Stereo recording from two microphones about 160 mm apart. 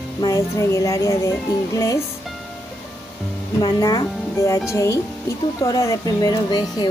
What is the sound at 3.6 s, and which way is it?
Speech, 25° left (ahead or behind).